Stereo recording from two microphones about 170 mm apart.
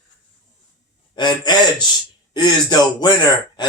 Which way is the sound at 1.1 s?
25° left (ahead or behind).